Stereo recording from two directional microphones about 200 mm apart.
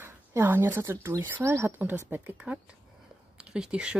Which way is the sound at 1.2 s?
10° right (ahead or behind).